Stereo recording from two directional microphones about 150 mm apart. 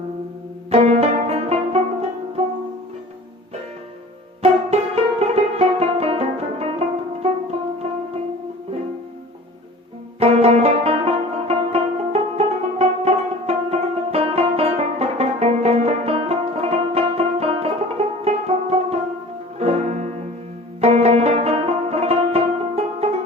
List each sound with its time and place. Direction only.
0.7 s music: 40° right (ahead or behind)
4.4 s music: 45° right (ahead or behind)
10.2 s music: 40° right (ahead or behind)